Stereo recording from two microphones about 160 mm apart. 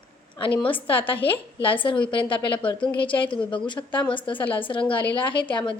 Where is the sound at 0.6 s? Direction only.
35° left (ahead or behind).